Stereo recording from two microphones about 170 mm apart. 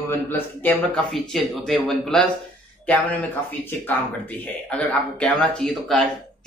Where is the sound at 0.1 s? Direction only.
10° left (ahead or behind).